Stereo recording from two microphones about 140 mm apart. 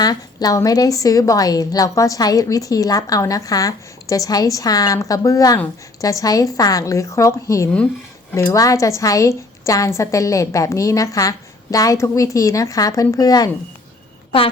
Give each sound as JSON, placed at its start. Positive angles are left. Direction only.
{"t": 0.0, "sound": "a woman's voice", "side_deg": 30}